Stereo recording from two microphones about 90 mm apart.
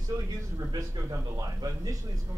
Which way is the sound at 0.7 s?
45° right (ahead or behind).